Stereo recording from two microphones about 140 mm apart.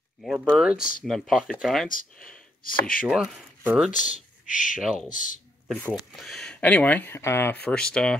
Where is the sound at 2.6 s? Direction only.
85° left.